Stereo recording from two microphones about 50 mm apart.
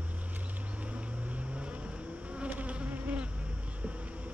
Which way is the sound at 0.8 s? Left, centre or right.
Right.